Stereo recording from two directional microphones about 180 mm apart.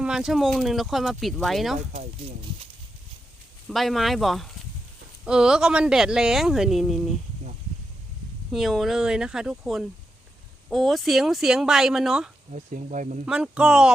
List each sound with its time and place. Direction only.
0.0 s speech: 5° right (ahead or behind)
3.7 s speech: centre (ahead or behind)
8.5 s speech: centre (ahead or behind)
12.5 s speech: 45° right (ahead or behind)
13.2 s speech: 5° right (ahead or behind)